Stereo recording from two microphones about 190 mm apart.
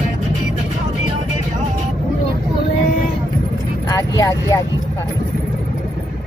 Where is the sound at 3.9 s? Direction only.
15° left (ahead or behind).